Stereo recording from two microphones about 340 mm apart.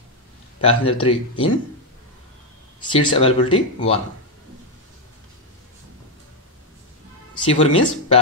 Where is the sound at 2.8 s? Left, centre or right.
Centre.